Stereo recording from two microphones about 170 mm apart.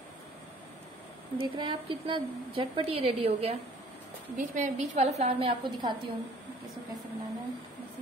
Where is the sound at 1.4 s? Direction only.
30° right (ahead or behind).